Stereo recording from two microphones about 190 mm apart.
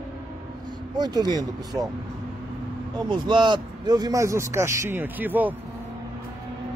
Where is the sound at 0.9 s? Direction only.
20° right (ahead or behind).